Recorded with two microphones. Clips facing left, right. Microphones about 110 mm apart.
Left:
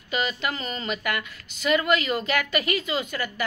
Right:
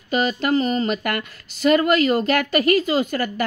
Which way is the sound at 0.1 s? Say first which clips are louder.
Right 8 dB; 45° right (ahead or behind).